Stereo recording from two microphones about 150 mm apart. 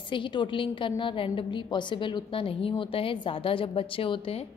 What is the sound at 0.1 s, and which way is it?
A woman's voice, 30° left (ahead or behind).